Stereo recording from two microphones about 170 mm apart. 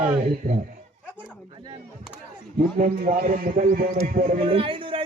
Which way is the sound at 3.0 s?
55° right (ahead or behind).